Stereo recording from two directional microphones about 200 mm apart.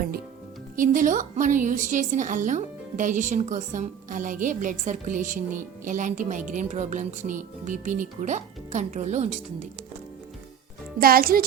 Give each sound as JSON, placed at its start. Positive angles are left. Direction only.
{"t": 0.8, "sound": "a woman's voice", "side_deg": -40}
{"t": 11.0, "sound": "a child's voice", "side_deg": -50}